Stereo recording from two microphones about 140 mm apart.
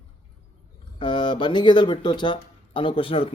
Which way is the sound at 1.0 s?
35° left (ahead or behind).